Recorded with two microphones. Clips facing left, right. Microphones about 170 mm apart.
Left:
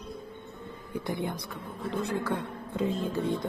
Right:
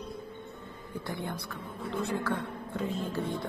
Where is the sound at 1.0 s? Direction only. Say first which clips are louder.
Left 4 dB; 15° left (ahead or behind).